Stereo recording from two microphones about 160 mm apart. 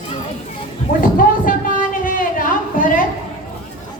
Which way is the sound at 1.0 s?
60° left (ahead or behind).